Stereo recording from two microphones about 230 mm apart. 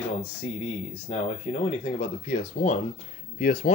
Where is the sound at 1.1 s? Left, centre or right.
Left.